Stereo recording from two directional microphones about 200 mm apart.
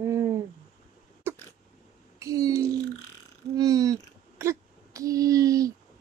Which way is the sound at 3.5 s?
20° right (ahead or behind).